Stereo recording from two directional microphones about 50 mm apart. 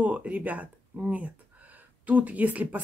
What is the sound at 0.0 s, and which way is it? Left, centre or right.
Speech, right.